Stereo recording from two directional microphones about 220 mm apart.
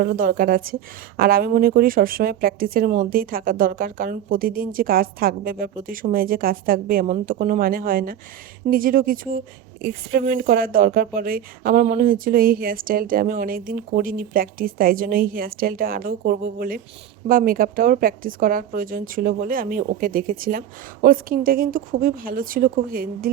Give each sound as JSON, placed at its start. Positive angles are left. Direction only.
{"t": 0.0, "sound": "a woman's voice", "side_deg": -40}